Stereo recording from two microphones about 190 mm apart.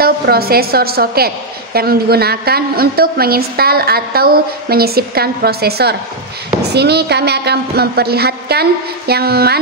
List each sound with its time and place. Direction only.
0.0 s a woman's voice: 55° right (ahead or behind)